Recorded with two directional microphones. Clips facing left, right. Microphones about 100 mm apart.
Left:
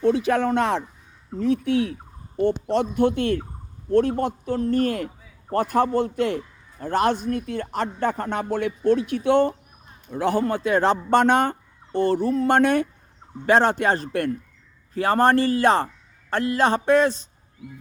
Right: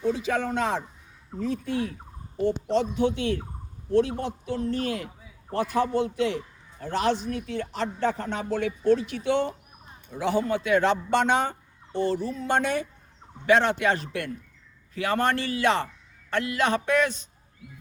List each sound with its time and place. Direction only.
0.0 s speech: 65° left (ahead or behind)
2.4 s a man's voice: 55° left (ahead or behind)
10.6 s a man's voice: 35° left (ahead or behind); by 12.9 s 50° left (ahead or behind)
13.4 s a man's voice: 40° left (ahead or behind)